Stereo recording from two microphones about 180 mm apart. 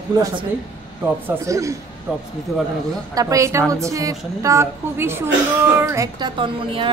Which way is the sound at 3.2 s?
20° right (ahead or behind).